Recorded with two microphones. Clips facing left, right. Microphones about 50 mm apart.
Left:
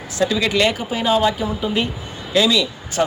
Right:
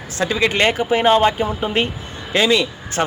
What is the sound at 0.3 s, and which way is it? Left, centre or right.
A man's voice, right.